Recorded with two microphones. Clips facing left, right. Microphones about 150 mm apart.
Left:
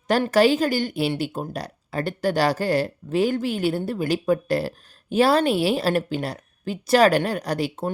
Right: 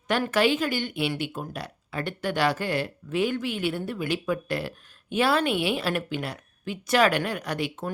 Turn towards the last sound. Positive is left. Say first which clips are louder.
# left 5 dB
turn(degrees=35)  # may be behind; listen again after turning